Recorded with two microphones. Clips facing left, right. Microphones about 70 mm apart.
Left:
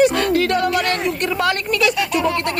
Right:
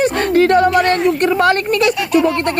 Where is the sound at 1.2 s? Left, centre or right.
Right.